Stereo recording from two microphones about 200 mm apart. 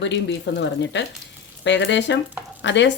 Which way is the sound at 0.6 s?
60° left (ahead or behind).